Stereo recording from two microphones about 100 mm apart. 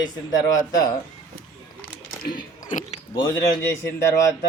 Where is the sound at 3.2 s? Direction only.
35° left (ahead or behind).